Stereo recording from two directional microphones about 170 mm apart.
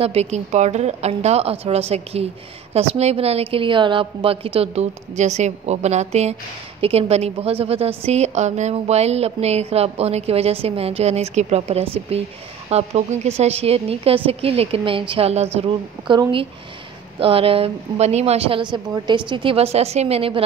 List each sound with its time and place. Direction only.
0.0 s speech: 35° right (ahead or behind)